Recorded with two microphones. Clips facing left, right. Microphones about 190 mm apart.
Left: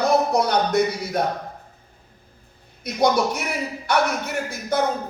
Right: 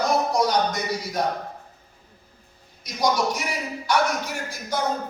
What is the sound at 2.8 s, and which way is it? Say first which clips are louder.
Speech: left 4 dB; 60° left (ahead or behind).